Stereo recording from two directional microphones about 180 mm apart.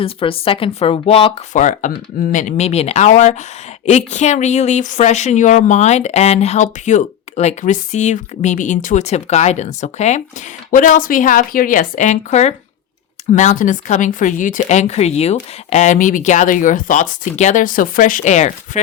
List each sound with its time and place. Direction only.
0.0 s speech: 30° left (ahead or behind)